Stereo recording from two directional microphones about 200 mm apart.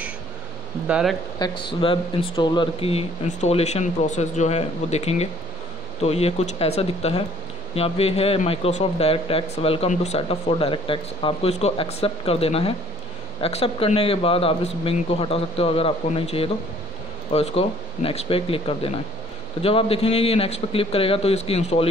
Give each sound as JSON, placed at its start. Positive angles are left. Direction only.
{"t": 0.8, "sound": "speech", "side_deg": -5}
{"t": 1.4, "sound": "speech", "side_deg": 25}